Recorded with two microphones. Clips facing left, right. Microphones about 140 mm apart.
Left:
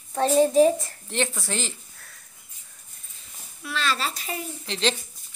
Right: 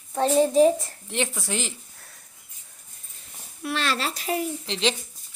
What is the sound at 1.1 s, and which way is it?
Speech, 10° right (ahead or behind).